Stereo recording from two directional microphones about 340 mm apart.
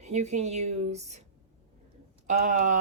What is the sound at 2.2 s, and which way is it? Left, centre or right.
Speech, right.